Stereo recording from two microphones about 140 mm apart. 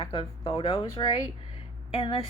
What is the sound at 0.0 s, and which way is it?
Speech, 40° left (ahead or behind).